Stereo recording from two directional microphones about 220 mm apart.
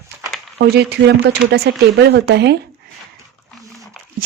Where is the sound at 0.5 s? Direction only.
50° right (ahead or behind).